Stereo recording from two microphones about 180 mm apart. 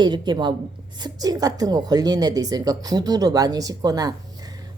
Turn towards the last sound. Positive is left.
turn(degrees=-20)  # may be behind; listen again after turning